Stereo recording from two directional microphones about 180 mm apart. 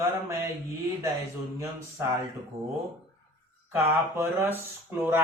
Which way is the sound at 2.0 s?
15° right (ahead or behind).